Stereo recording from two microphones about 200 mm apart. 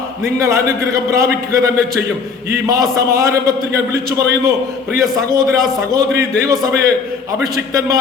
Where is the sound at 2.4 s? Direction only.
15° right (ahead or behind).